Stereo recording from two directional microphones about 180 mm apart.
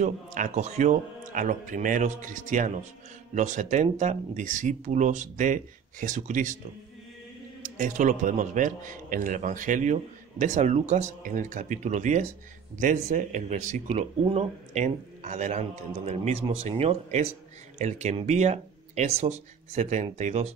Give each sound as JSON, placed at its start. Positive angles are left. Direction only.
{"t": 0.0, "sound": "a man's voice", "side_deg": -45}
{"t": 7.6, "sound": "a man's voice", "side_deg": -45}